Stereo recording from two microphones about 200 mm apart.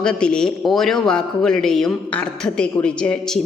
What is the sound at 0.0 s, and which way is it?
Speech, 5° left (ahead or behind).